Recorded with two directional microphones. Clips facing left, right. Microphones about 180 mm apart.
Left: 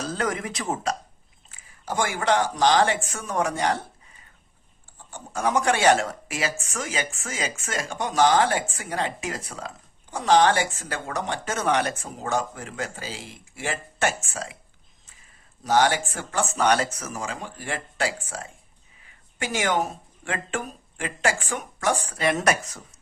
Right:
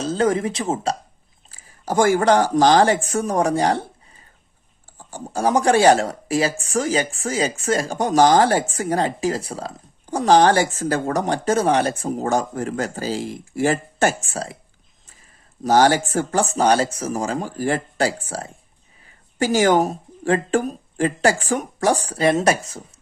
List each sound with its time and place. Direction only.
0.0 s speech: 25° right (ahead or behind)
1.5 s speech: 40° right (ahead or behind)
15.6 s speech: 40° right (ahead or behind)